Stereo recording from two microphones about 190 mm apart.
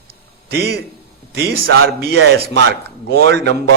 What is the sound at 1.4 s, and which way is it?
A man's voice, 60° right (ahead or behind).